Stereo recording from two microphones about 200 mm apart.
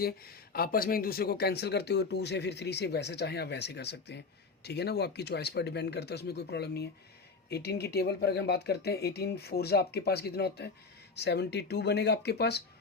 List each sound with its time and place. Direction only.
0.0 s speech: 50° left (ahead or behind)